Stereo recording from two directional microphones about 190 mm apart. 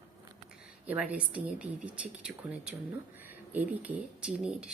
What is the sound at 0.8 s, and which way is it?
A woman's voice, 5° right (ahead or behind).